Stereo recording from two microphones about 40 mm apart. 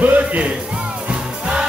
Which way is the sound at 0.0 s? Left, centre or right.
Right.